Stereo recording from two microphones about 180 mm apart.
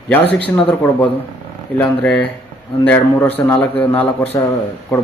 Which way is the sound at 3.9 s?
35° left (ahead or behind).